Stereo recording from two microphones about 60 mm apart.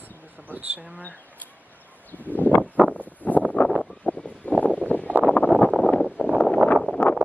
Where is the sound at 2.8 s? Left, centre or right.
Right.